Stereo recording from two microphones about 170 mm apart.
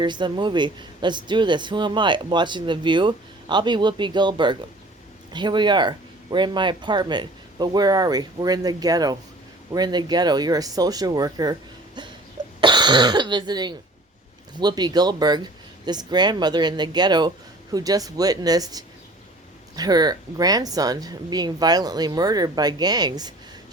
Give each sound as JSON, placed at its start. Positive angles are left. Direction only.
{"t": 0.0, "sound": "speech", "side_deg": -25}
{"t": 12.5, "sound": "speech", "side_deg": -25}